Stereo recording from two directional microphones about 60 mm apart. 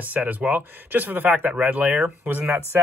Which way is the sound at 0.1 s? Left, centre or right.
Right.